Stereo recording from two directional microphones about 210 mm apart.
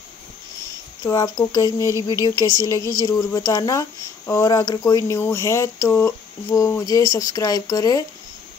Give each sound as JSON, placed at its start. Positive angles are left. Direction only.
{"t": 1.0, "sound": "speech", "side_deg": 15}